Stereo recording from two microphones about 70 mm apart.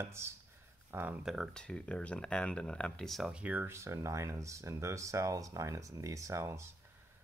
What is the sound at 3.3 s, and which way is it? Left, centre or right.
Speech, right.